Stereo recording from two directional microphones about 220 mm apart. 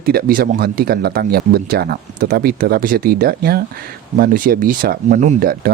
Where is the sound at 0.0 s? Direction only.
45° right (ahead or behind).